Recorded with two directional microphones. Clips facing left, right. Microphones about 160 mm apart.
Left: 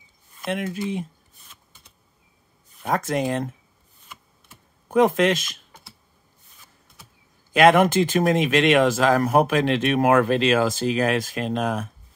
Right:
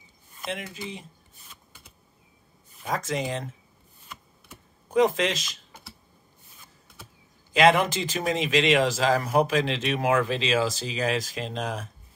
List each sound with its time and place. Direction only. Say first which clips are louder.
0.5 s speech: left 8 dB; 55° left (ahead or behind)
2.8 s speech: left 5 dB; 55° left (ahead or behind)
4.9 s speech: left 4 dB; 55° left (ahead or behind)
7.5 s speech: left 5 dB; 55° left (ahead or behind)